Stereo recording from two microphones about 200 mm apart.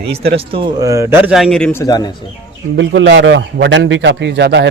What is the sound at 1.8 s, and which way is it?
Speech, 20° left (ahead or behind).